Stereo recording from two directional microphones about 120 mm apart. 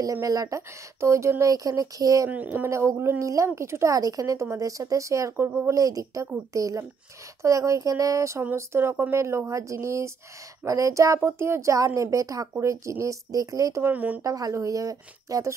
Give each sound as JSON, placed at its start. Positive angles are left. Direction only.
{"t": 0.0, "sound": "a woman's voice", "side_deg": -30}
{"t": 2.2, "sound": "a woman's voice", "side_deg": -15}
{"t": 13.9, "sound": "a woman's voice", "side_deg": -15}
{"t": 14.2, "sound": "a woman's voice", "side_deg": -30}